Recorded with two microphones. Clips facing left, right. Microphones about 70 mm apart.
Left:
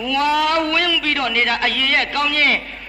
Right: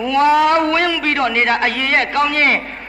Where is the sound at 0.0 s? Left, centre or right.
Right.